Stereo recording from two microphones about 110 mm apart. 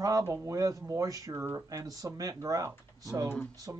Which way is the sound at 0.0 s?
30° right (ahead or behind).